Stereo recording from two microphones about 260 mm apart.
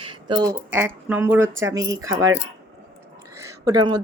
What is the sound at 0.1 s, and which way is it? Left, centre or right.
Speech, centre.